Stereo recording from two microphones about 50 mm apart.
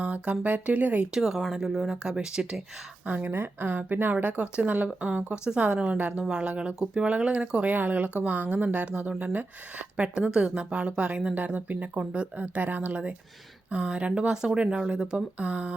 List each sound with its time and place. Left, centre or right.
0.0 s speech: right
1.1 s speech: centre
3.1 s speech: right
4.1 s speech: right
7.7 s speech: right